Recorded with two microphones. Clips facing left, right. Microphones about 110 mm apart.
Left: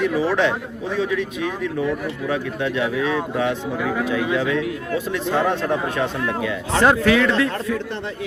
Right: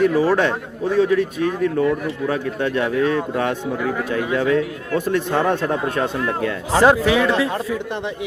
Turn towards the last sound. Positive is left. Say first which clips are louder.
# right 1 dB
turn(degrees=-15)  # may be behind; listen again after turning